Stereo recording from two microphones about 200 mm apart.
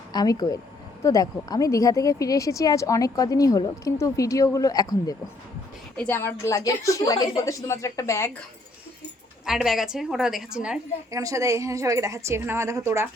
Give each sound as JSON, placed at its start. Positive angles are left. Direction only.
{"t": 0.1, "sound": "speech", "side_deg": 20}
{"t": 9.5, "sound": "a woman's voice", "side_deg": 0}
{"t": 11.1, "sound": "a woman's voice", "side_deg": -15}